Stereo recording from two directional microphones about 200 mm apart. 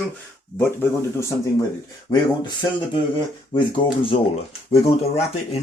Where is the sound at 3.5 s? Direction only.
25° left (ahead or behind).